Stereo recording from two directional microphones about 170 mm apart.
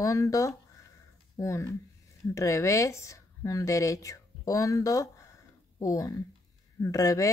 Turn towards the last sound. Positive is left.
turn(degrees=20)  # may be behind; listen again after turning